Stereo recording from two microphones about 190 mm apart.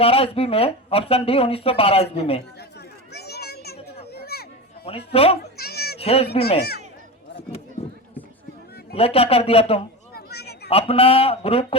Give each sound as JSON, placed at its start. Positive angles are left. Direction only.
{"t": 0.0, "sound": "speech", "side_deg": 30}
{"t": 3.1, "sound": "children playing", "side_deg": 60}
{"t": 4.1, "sound": "a sound", "side_deg": 55}
{"t": 4.9, "sound": "speech", "side_deg": 30}
{"t": 5.5, "sound": "children playing", "side_deg": 55}
{"t": 6.0, "sound": "speech", "side_deg": 30}
{"t": 6.6, "sound": "speech", "side_deg": 55}
{"t": 9.0, "sound": "speech", "side_deg": 30}
{"t": 10.2, "sound": "a sound", "side_deg": 60}
{"t": 10.7, "sound": "speech", "side_deg": 30}